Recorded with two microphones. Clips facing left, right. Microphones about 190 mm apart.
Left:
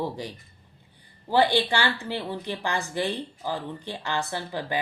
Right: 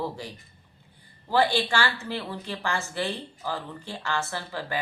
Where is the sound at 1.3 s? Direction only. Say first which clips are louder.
Left 2 dB; 15° left (ahead or behind).